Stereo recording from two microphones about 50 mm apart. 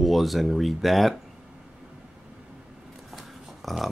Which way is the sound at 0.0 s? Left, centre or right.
Centre.